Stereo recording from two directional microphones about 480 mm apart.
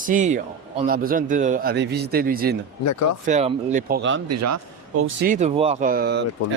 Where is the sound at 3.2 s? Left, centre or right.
Centre.